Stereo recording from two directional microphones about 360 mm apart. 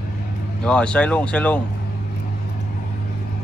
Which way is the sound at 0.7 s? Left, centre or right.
Centre.